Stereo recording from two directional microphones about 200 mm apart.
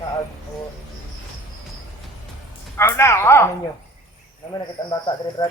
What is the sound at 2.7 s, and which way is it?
Speech, 15° left (ahead or behind).